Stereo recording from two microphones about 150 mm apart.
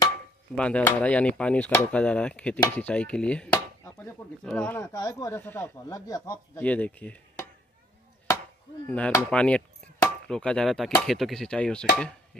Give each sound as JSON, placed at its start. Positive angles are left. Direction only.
{"t": 0.6, "sound": "speech", "side_deg": 10}
{"t": 4.8, "sound": "speech", "side_deg": 25}
{"t": 6.6, "sound": "speech", "side_deg": 10}
{"t": 8.8, "sound": "speech", "side_deg": 10}
{"t": 10.0, "sound": "a sound", "side_deg": 5}
{"t": 11.1, "sound": "speech", "side_deg": 0}